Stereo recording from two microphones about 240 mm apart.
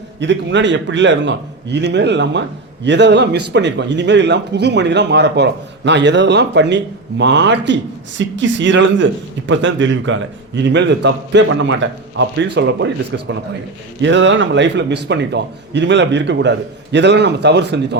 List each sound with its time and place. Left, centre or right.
0.2 s a man's voice: right